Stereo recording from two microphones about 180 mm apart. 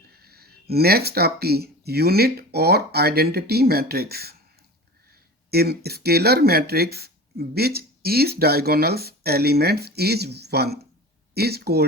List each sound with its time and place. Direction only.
0.1 s speech: 60° right (ahead or behind)
5.5 s speech: 60° right (ahead or behind)